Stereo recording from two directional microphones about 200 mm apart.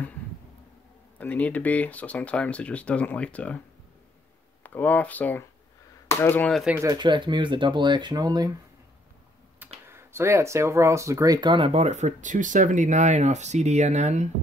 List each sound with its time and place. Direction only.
1.1 s speech: 10° left (ahead or behind)
4.6 s speech: 10° left (ahead or behind)
6.6 s speech: 5° right (ahead or behind)
6.9 s speech: 20° right (ahead or behind)
9.8 s speech: 10° right (ahead or behind); by 14.3 s 35° right (ahead or behind)